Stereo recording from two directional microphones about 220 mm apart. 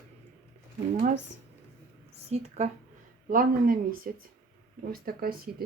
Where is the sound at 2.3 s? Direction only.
30° right (ahead or behind).